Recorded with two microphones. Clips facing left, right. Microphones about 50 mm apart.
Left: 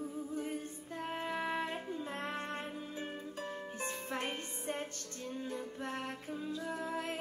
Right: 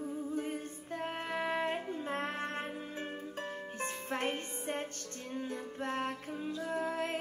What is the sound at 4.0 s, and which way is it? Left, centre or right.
Music, right.